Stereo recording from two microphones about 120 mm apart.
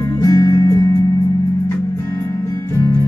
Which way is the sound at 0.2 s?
25° left (ahead or behind).